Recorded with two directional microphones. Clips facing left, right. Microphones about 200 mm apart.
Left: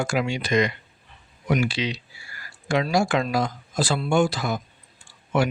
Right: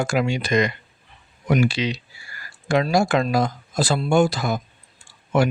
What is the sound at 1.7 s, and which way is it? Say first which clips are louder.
Speech: right 3 dB; 45° right (ahead or behind).